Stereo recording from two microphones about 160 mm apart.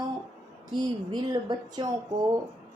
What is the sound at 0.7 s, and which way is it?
A woman's voice, 25° right (ahead or behind).